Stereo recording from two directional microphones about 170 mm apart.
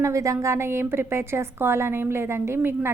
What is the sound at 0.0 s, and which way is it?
A woman's voice, 20° right (ahead or behind).